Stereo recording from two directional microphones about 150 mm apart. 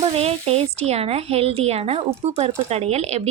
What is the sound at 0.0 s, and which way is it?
A woman's voice, 40° right (ahead or behind).